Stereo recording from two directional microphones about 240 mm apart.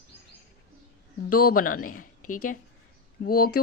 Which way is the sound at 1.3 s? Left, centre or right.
Left.